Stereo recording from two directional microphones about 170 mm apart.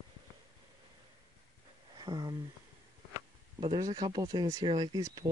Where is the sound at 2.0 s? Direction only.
25° right (ahead or behind).